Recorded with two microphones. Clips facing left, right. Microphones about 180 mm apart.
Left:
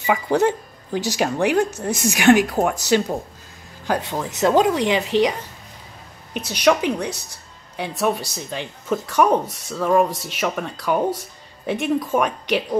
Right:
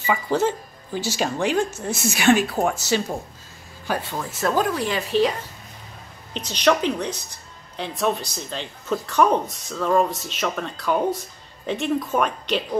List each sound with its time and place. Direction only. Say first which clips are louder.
0.0 s speech: left 3 dB; 15° left (ahead or behind)
3.8 s speech: left 4 dB; 20° left (ahead or behind)
6.3 s a woman's voice: left 2 dB; 10° left (ahead or behind)